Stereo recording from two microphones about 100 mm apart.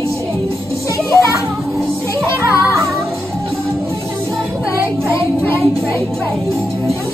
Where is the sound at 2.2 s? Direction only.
30° left (ahead or behind).